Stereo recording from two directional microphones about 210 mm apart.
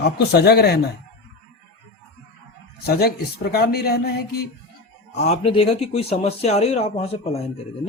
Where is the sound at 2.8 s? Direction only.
50° left (ahead or behind).